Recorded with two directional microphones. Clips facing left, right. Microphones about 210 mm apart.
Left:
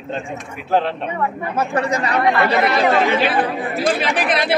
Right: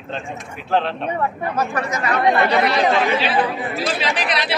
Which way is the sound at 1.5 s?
30° left (ahead or behind).